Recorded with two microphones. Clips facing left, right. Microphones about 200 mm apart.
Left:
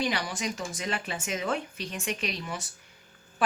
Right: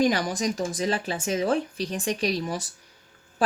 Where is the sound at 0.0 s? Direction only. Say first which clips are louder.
Right 7 dB; 45° right (ahead or behind).